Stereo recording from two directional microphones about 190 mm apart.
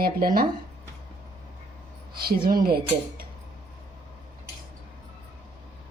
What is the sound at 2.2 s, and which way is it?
Speech, 55° right (ahead or behind).